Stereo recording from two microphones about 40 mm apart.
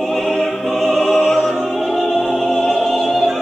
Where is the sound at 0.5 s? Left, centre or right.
Centre.